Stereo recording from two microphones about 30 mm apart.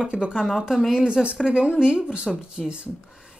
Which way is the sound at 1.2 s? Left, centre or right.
Centre.